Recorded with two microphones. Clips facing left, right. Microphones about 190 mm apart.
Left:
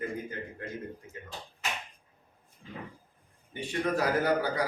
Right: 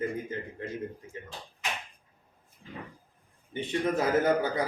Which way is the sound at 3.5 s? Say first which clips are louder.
Right 2 dB; 20° right (ahead or behind).